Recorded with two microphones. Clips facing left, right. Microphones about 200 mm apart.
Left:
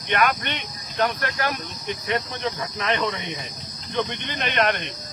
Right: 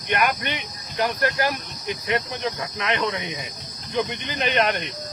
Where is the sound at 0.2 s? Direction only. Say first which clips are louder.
Left 3 dB; 10° right (ahead or behind).